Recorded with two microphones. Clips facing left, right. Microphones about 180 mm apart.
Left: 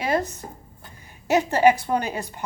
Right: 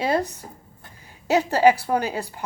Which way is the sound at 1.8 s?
10° right (ahead or behind).